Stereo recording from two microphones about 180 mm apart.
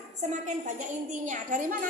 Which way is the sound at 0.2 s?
40° right (ahead or behind).